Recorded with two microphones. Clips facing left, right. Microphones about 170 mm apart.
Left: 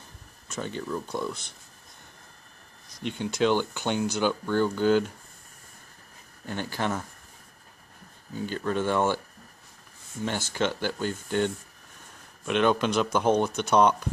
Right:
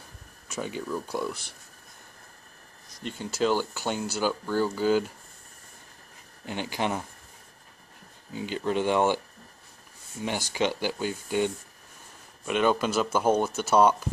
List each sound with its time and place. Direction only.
0.5 s speech: 5° right (ahead or behind)
3.2 s speech: 5° right (ahead or behind)
6.4 s speech: 15° right (ahead or behind)
8.3 s speech: 15° right (ahead or behind)
10.2 s speech: 10° right (ahead or behind)